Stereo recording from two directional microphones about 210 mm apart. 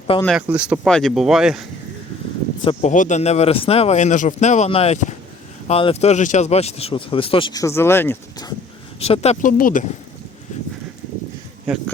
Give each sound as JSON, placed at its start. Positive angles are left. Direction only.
{"t": 0.3, "sound": "speech", "side_deg": -5}
{"t": 2.6, "sound": "speech", "side_deg": 35}
{"t": 9.0, "sound": "speech", "side_deg": 30}